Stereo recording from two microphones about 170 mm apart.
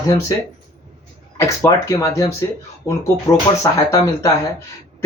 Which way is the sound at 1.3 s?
20° left (ahead or behind).